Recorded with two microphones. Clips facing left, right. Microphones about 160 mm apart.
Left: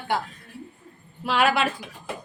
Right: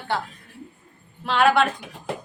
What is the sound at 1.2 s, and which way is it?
Speech, 5° left (ahead or behind).